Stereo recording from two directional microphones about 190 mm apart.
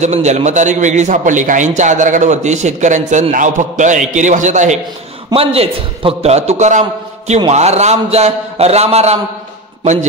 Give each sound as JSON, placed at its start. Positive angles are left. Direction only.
{"t": 0.0, "sound": "a man's voice", "side_deg": -35}